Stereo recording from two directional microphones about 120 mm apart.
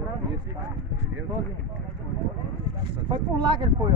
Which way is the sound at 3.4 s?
40° right (ahead or behind).